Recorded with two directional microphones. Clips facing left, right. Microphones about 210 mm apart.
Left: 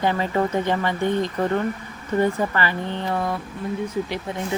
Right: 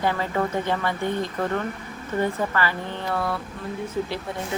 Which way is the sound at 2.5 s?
20° left (ahead or behind).